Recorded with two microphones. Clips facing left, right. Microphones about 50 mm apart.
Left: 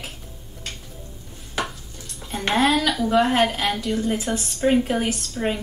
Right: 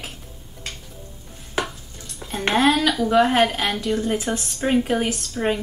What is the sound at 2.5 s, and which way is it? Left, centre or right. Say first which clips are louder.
Speech: right 1 dB; centre.